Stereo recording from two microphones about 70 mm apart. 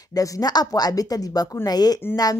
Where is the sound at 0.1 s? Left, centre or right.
Left.